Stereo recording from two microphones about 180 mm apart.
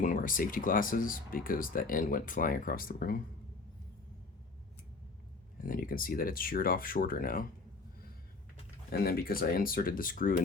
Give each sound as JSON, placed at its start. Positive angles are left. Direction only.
{"t": 0.0, "sound": "speech", "side_deg": 50}
{"t": 5.6, "sound": "speech", "side_deg": 50}
{"t": 8.9, "sound": "speech", "side_deg": 60}